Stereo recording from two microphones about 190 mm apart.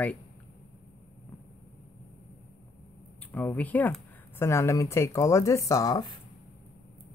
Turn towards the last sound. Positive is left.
turn(degrees=20)  # may be behind; listen again after turning